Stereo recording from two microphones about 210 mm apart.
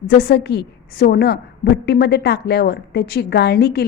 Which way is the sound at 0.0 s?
50° left (ahead or behind).